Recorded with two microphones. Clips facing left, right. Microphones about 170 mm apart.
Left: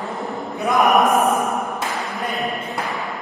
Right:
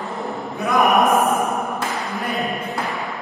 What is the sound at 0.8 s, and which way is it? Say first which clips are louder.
Chant: even; centre (ahead or behind).